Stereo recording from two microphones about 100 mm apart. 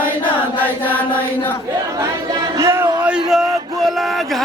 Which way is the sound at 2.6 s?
30° right (ahead or behind).